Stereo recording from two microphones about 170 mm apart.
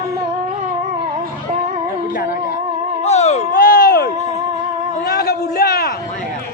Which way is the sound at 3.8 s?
65° left (ahead or behind).